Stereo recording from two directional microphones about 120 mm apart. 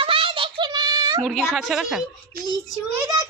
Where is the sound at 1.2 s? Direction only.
5° right (ahead or behind).